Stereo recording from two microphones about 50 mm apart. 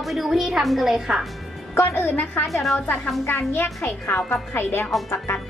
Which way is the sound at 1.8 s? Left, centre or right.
Left.